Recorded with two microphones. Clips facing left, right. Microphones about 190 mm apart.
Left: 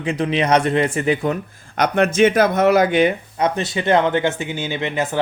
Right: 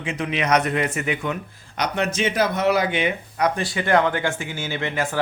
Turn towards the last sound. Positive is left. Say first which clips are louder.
# left 3 dB
turn(degrees=20)  # may be behind; listen again after turning